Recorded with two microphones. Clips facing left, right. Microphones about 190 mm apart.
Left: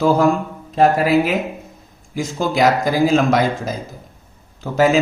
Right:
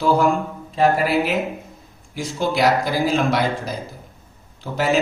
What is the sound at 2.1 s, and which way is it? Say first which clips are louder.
Speech: left 2 dB; 45° left (ahead or behind).